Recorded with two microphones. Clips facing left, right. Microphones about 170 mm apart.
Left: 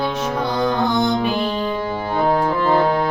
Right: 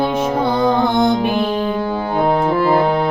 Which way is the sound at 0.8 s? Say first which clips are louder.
Right 3 dB; 55° right (ahead or behind).